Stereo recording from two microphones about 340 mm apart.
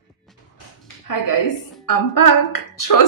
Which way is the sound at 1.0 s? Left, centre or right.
Left.